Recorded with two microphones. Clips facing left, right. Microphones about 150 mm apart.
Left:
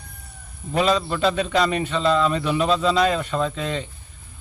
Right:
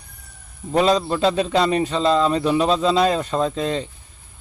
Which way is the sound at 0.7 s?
35° right (ahead or behind).